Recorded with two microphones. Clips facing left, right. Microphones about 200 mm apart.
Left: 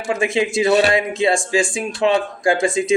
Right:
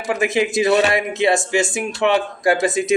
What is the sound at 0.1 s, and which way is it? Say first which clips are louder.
Speech: even; 25° left (ahead or behind).